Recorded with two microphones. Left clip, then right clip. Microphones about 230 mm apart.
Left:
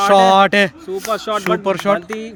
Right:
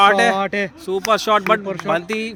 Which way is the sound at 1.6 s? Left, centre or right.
Left.